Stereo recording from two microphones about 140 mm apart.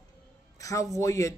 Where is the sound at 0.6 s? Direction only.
25° left (ahead or behind).